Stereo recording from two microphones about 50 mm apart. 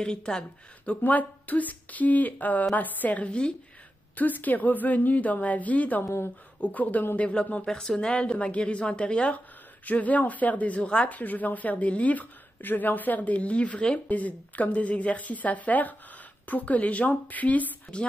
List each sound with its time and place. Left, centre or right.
0.0 s speech: centre
0.8 s speech: left
6.0 s speech: left
6.6 s a woman's voice: left
7.6 s a woman's voice: centre; by 17.7 s left